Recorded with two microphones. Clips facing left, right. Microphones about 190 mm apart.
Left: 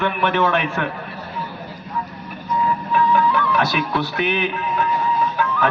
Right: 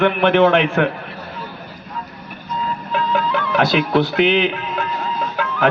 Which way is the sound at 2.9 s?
60° right (ahead or behind).